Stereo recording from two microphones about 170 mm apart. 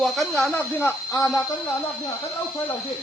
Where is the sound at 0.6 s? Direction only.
15° left (ahead or behind).